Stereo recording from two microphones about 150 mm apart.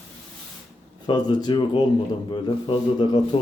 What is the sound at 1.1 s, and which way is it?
A man's voice, 30° left (ahead or behind).